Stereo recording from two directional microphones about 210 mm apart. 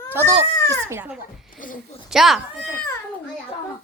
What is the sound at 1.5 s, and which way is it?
Speech, 40° left (ahead or behind).